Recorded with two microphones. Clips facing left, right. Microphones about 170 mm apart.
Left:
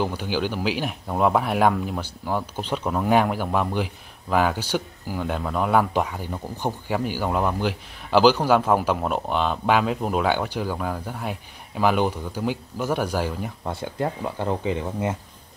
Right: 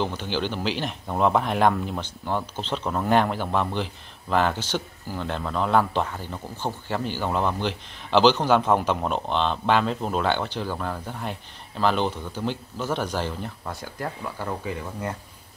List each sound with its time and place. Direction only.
0.0 s speech: 10° left (ahead or behind)
13.7 s speech: 25° left (ahead or behind)